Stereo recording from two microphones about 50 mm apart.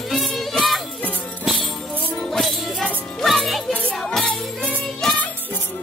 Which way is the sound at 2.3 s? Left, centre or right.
Centre.